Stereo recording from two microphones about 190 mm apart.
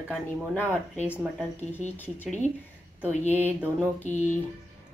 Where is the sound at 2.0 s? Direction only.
10° left (ahead or behind).